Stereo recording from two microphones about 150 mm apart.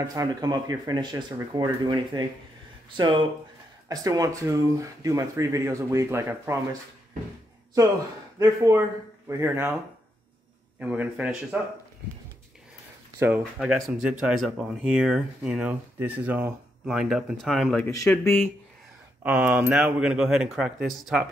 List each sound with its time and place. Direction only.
0.0 s speech: 25° right (ahead or behind)
3.9 s speech: 25° right (ahead or behind)
8.4 s a man's voice: 20° right (ahead or behind)
10.8 s a man's voice: 10° right (ahead or behind)
13.4 s speech: centre (ahead or behind)
17.8 s speech: 15° left (ahead or behind)
19.2 s speech: 10° right (ahead or behind)